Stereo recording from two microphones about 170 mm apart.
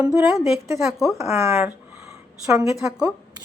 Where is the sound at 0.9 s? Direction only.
Centre (ahead or behind).